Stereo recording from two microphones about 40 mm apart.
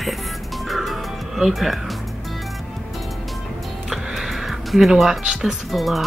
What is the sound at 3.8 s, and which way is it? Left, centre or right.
Music, centre.